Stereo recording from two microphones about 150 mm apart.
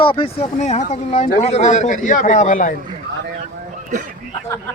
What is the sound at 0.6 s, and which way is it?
Speech, 50° left (ahead or behind).